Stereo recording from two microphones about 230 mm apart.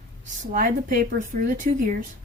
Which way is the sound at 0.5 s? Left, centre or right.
Right.